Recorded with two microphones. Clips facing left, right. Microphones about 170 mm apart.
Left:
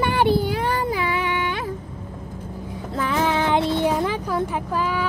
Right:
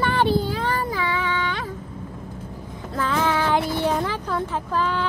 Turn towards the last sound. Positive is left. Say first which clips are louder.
# even
turn(degrees=10)  # may be behind; listen again after turning